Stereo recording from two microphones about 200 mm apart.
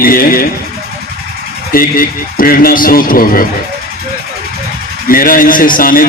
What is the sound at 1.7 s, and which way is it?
A man's voice, 45° left (ahead or behind).